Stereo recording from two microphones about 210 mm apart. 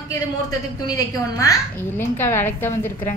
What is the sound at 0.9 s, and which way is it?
A woman's voice, 15° left (ahead or behind).